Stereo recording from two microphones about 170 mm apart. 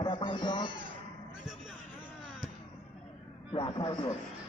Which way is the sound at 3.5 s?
25° left (ahead or behind).